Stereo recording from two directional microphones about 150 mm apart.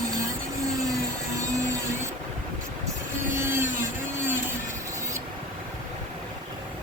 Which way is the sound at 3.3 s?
15° right (ahead or behind).